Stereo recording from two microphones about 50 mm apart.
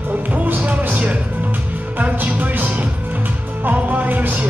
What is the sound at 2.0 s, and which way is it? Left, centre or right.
Music, right.